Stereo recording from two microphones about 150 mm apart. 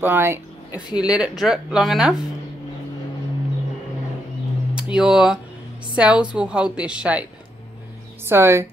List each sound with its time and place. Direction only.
0.0 s speech: 15° right (ahead or behind)
0.8 s speech: 30° left (ahead or behind)
1.1 s speech: 5° right (ahead or behind)
4.9 s a woman's voice: 5° right (ahead or behind)
8.3 s a woman's voice: 20° right (ahead or behind)